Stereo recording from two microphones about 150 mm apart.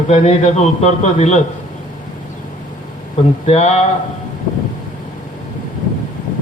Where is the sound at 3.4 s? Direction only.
45° left (ahead or behind).